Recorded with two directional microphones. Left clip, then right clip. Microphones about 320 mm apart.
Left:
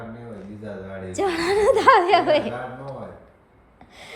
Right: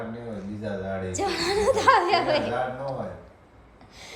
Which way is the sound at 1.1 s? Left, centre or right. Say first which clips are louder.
Left 5 dB; left.